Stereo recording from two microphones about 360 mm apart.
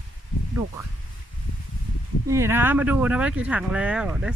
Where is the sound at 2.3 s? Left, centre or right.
Centre.